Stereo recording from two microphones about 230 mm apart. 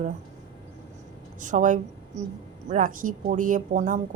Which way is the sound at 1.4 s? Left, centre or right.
Right.